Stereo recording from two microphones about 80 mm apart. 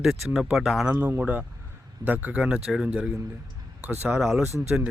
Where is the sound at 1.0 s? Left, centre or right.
Centre.